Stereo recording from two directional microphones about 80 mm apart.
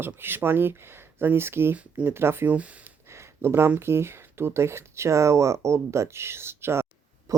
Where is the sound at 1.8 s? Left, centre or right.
Centre.